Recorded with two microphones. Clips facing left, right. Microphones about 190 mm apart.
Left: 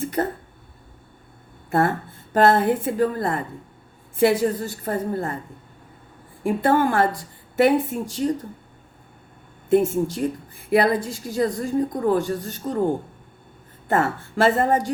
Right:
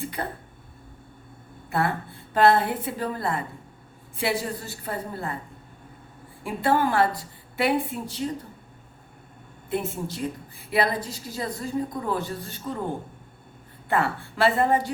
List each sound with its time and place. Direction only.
0.0 s a sound: 45° left (ahead or behind)
2.3 s a woman's voice: 45° left (ahead or behind)
6.4 s a woman's voice: 45° left (ahead or behind)
9.6 s a woman's voice: 45° left (ahead or behind)
13.8 s a woman's voice: 45° left (ahead or behind)